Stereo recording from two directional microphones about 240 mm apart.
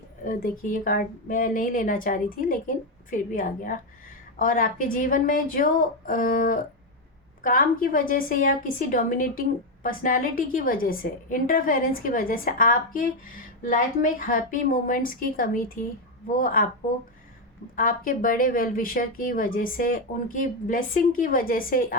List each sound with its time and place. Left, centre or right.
0.3 s a woman's voice: left
17.7 s a woman's voice: left